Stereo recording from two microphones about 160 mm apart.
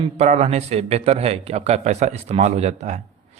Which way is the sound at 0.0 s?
45° right (ahead or behind).